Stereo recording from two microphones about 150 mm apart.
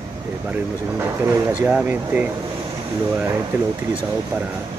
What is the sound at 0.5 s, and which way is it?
Speech, 15° right (ahead or behind).